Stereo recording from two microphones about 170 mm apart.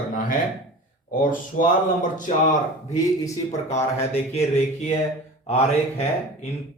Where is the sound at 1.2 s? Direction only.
50° left (ahead or behind).